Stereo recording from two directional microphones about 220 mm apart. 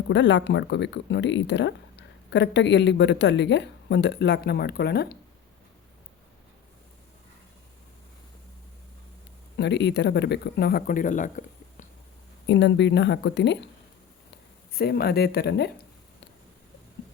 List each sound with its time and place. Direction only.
0.1 s speech: 55° left (ahead or behind)
9.6 s speech: 50° left (ahead or behind); by 11.9 s 35° left (ahead or behind)
12.5 s speech: 55° left (ahead or behind)
14.7 s speech: 45° left (ahead or behind)